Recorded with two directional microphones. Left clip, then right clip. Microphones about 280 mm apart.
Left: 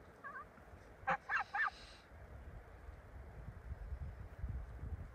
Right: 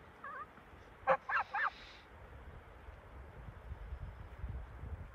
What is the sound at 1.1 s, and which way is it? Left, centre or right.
Goose, left.